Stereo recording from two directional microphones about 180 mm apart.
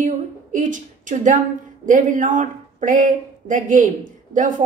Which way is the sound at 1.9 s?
45° right (ahead or behind).